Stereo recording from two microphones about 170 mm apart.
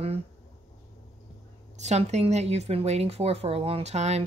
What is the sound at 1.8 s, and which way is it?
Speech, 40° right (ahead or behind).